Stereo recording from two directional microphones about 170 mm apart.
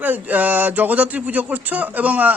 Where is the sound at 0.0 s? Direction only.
10° right (ahead or behind).